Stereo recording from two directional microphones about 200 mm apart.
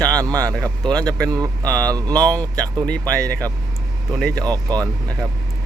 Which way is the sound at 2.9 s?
10° left (ahead or behind).